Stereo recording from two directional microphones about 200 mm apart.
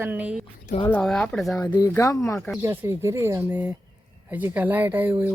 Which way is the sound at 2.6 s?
10° right (ahead or behind).